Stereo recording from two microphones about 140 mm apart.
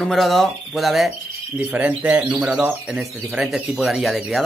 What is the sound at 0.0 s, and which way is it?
Speech, centre (ahead or behind).